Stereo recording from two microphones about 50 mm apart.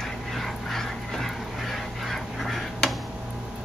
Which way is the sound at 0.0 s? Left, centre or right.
Centre.